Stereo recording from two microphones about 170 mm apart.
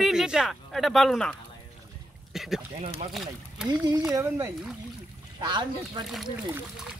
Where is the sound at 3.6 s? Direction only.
20° right (ahead or behind).